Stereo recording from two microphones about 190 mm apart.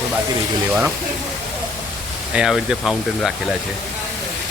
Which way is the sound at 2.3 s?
5° right (ahead or behind).